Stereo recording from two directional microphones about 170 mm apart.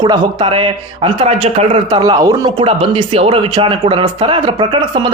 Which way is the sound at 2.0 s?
20° right (ahead or behind).